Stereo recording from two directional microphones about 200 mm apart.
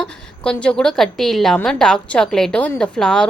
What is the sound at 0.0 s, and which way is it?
A woman's voice, 5° left (ahead or behind).